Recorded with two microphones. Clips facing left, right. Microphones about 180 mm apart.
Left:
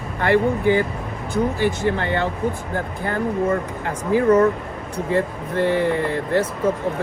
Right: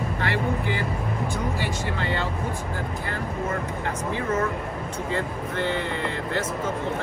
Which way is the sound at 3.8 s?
35° left (ahead or behind).